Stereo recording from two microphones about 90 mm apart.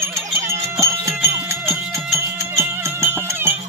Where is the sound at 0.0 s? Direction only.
30° right (ahead or behind).